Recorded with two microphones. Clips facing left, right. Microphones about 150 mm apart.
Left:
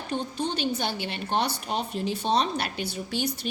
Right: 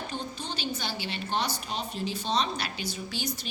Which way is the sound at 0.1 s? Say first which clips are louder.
Left 7 dB; 60° left (ahead or behind).